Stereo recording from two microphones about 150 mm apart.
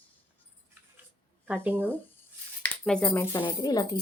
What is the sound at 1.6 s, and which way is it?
Speech, 10° right (ahead or behind).